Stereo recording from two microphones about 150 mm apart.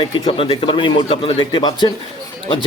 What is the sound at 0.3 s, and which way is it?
Speech, 40° left (ahead or behind).